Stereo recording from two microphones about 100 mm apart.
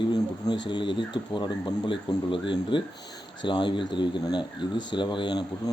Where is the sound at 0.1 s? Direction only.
45° left (ahead or behind).